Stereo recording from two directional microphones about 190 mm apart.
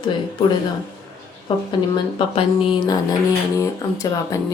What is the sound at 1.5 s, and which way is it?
Speech, 25° left (ahead or behind).